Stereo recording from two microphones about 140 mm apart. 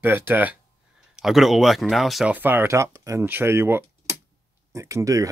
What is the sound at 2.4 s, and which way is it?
Speech, 15° right (ahead or behind).